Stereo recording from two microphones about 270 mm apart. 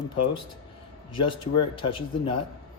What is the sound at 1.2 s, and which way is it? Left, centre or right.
Speech, centre.